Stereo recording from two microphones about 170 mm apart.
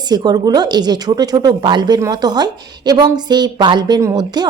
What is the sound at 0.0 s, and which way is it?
A woman's voice, 25° right (ahead or behind).